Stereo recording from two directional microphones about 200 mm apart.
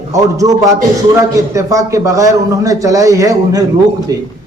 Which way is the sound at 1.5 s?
15° right (ahead or behind).